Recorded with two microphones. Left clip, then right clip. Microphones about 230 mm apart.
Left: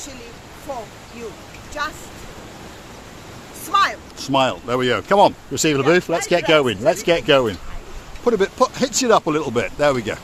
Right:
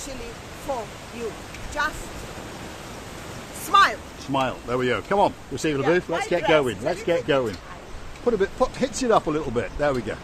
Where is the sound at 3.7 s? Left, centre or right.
Centre.